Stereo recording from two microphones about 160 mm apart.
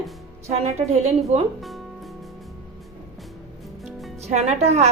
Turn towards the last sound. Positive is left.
turn(degrees=-45)  # may be behind; listen again after turning